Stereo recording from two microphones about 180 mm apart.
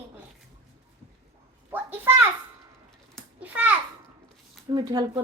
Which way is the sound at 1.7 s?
10° right (ahead or behind).